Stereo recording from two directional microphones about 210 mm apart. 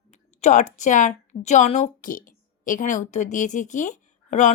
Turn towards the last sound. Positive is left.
turn(degrees=35)  # may be behind; listen again after turning